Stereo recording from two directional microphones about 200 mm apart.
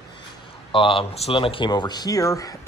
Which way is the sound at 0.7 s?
25° left (ahead or behind).